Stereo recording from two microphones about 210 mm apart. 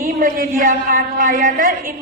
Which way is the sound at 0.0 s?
40° right (ahead or behind).